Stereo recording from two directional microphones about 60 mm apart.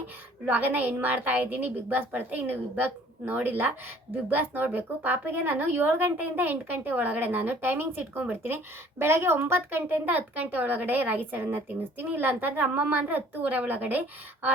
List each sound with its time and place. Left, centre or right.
0.4 s a woman's voice: right
9.9 s a woman's voice: right